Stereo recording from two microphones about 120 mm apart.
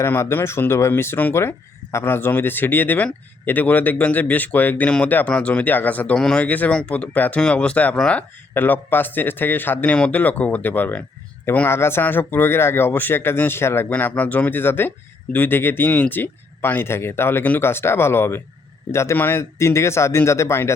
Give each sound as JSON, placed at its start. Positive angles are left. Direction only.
{"t": 0.0, "sound": "speech", "side_deg": 20}